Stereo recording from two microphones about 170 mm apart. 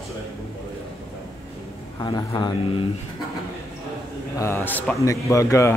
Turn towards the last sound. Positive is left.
turn(degrees=20)  # may be behind; listen again after turning